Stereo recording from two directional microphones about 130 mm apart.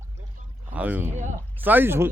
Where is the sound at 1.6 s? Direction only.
15° right (ahead or behind).